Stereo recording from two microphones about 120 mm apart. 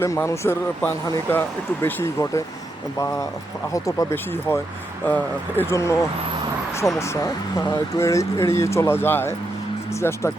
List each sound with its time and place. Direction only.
0.0 s speech: 25° left (ahead or behind)
3.7 s speech: 25° left (ahead or behind)